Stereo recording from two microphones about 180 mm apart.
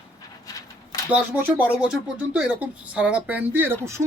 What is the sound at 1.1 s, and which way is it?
Speech, 10° right (ahead or behind).